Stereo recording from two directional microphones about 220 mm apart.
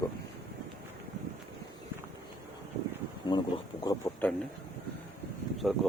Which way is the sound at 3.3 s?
20° left (ahead or behind).